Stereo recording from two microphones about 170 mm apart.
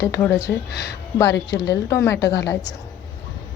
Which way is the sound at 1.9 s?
15° left (ahead or behind).